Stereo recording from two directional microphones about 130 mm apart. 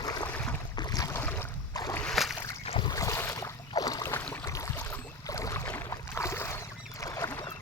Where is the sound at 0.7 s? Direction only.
30° left (ahead or behind).